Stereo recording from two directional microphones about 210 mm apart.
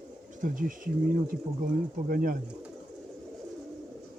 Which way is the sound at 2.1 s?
40° right (ahead or behind).